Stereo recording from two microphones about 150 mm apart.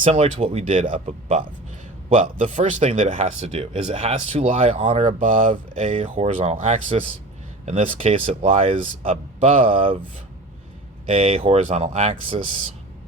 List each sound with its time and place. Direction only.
0.0 s a man's voice: 45° right (ahead or behind)
2.6 s speech: 55° right (ahead or behind)
2.9 s speech: 40° right (ahead or behind)
11.0 s speech: 40° right (ahead or behind)